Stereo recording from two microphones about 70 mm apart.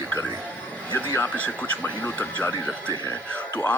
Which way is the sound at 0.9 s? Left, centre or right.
Left.